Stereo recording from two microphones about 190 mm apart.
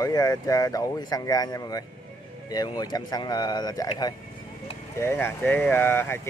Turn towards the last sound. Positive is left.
turn(degrees=10)  # may be behind; listen again after turning